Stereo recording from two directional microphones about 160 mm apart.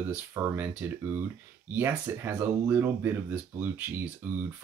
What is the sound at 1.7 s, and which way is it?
Speech, 15° right (ahead or behind).